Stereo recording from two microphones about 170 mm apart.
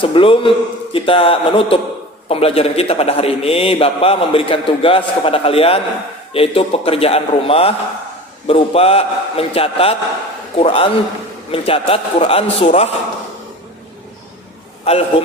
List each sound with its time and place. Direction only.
0.0 s a man's voice: 30° left (ahead or behind)
14.9 s a man's voice: 35° left (ahead or behind)